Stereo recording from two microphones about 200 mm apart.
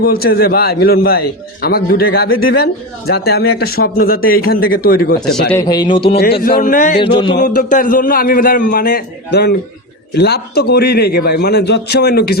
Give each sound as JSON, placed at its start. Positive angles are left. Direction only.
{"t": 0.0, "sound": "a man's voice", "side_deg": 50}
{"t": 5.6, "sound": "a man's voice", "side_deg": 20}
{"t": 6.4, "sound": "a man's voice", "side_deg": 45}
{"t": 7.0, "sound": "a man's voice", "side_deg": 25}
{"t": 7.3, "sound": "a man's voice", "side_deg": 40}